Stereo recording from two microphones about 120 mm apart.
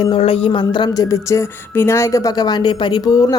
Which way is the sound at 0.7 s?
35° left (ahead or behind).